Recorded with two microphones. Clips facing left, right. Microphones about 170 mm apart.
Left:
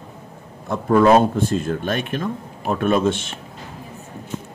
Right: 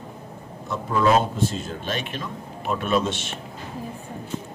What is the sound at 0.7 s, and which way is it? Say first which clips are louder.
Speech: left 6 dB; 50° left (ahead or behind).